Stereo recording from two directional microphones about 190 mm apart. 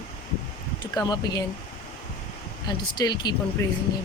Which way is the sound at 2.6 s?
20° left (ahead or behind).